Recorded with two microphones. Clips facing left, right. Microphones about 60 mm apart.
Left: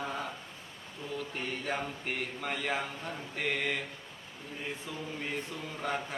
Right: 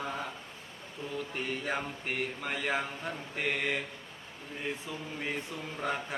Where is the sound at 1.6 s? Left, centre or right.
Centre.